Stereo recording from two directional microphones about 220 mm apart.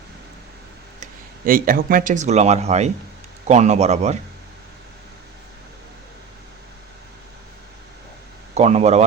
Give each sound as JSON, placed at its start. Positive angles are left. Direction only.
{"t": 1.5, "sound": "speech", "side_deg": -40}
{"t": 8.5, "sound": "a man's voice", "side_deg": -30}